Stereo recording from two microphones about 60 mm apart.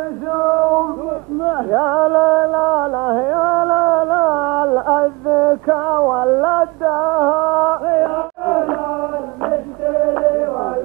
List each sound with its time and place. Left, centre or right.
0.3 s male singing: centre
1.5 s music: centre
5.4 s male singing: centre
10.1 s a sound: centre